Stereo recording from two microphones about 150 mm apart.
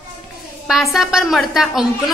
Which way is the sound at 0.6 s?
Centre (ahead or behind).